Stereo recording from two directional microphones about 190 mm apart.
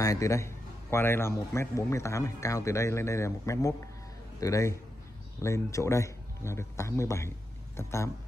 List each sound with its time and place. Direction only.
0.0 s a man's voice: 15° left (ahead or behind)